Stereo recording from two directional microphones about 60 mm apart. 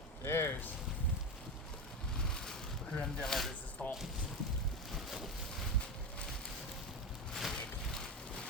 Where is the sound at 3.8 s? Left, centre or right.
Left.